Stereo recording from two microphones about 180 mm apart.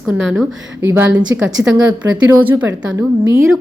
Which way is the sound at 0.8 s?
10° right (ahead or behind).